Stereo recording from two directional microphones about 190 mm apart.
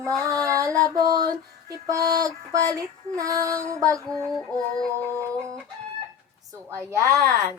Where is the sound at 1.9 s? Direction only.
20° right (ahead or behind).